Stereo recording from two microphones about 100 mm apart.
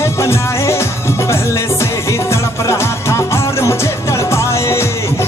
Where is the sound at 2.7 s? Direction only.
25° left (ahead or behind).